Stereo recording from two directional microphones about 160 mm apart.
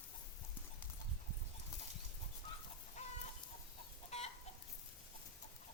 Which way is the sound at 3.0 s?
45° left (ahead or behind).